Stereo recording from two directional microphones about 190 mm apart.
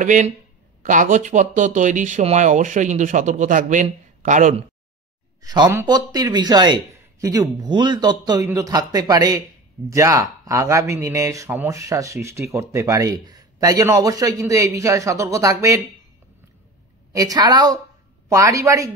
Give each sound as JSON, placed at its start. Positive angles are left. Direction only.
{"t": 0.0, "sound": "speech", "side_deg": -40}
{"t": 5.4, "sound": "speech", "side_deg": -20}
{"t": 17.1, "sound": "speech", "side_deg": -20}